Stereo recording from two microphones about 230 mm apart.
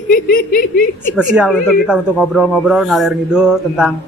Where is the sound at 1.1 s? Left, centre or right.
Centre.